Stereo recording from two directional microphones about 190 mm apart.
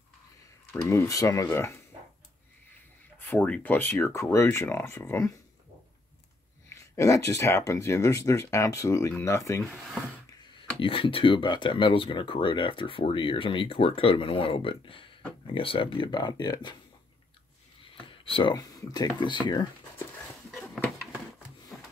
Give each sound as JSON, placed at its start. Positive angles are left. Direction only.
{"t": 0.8, "sound": "speech", "side_deg": 15}
{"t": 3.2, "sound": "speech", "side_deg": 10}
{"t": 6.7, "sound": "speech", "side_deg": 15}
{"t": 9.8, "sound": "speech", "side_deg": 0}
{"t": 10.8, "sound": "speech", "side_deg": 30}
{"t": 17.9, "sound": "speech", "side_deg": 30}
{"t": 20.5, "sound": "a sound", "side_deg": 0}